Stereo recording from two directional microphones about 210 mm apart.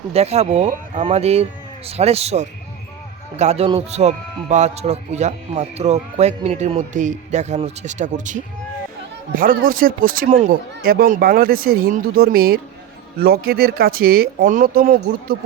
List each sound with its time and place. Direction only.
0.1 s speech: 30° right (ahead or behind)